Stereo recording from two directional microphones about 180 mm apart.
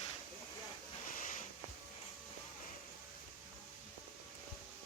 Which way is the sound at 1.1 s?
50° left (ahead or behind).